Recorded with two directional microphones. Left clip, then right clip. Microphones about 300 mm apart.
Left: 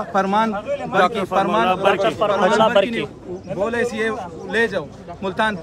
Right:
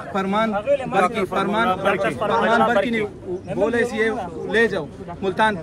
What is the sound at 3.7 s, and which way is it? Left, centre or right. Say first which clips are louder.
A man's voice: even; centre.